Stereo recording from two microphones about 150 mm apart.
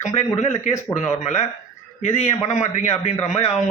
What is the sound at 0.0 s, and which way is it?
Speech, 50° left (ahead or behind).